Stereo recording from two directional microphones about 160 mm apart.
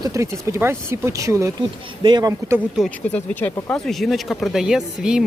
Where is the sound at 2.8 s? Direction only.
Centre (ahead or behind).